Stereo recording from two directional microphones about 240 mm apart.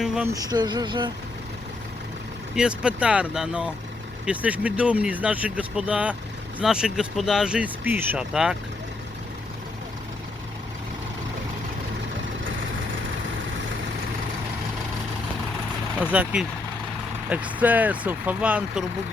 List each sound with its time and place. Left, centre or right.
0.0 s a sound: centre
0.3 s speech: centre
2.6 s speech: centre
16.0 s speech: centre